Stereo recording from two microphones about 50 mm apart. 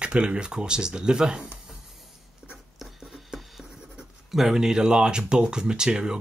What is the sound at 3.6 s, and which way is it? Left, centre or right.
Writing, centre.